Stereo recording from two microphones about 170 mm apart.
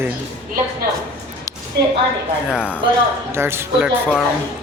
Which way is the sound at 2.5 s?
5° right (ahead or behind).